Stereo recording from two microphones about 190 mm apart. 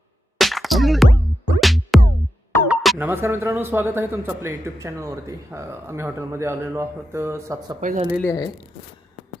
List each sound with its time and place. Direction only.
0.3 s music: centre (ahead or behind)
3.1 s speech: 10° right (ahead or behind)
7.8 s speech: 40° right (ahead or behind)
8.2 s speech: 15° left (ahead or behind)